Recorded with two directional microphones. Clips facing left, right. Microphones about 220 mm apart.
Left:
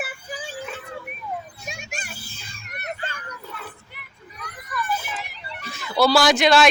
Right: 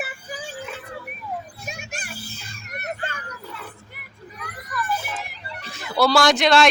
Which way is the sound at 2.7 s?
50° right (ahead or behind).